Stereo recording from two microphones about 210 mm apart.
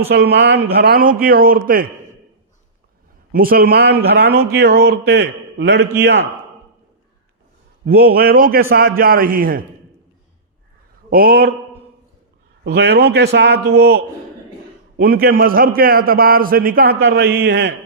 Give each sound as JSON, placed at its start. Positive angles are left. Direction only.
{"t": 0.1, "sound": "speech", "side_deg": -50}
{"t": 3.3, "sound": "a man's voice", "side_deg": -45}
{"t": 7.9, "sound": "speech", "side_deg": -45}
{"t": 11.1, "sound": "speech", "side_deg": -45}
{"t": 12.6, "sound": "speech", "side_deg": -50}